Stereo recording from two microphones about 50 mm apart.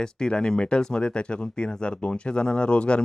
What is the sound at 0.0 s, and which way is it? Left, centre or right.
Speech, centre.